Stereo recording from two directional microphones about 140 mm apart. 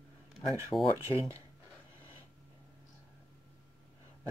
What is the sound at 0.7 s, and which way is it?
Speech, 25° left (ahead or behind).